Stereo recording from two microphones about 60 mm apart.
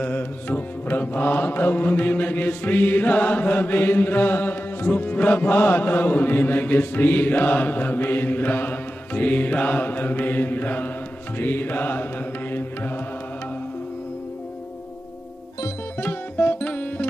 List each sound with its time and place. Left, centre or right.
0.0 s mantra: left
12.5 s music: left
16.0 s sitar: left